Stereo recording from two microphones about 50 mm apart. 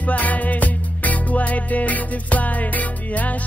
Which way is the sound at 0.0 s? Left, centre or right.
Left.